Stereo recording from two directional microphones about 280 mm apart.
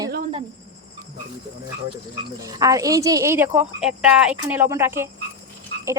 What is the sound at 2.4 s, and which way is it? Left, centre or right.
A woman's voice, centre.